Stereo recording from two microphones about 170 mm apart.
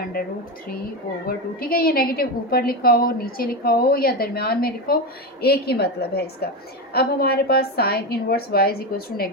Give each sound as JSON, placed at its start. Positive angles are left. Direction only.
{"t": 1.3, "sound": "a woman's voice", "side_deg": 60}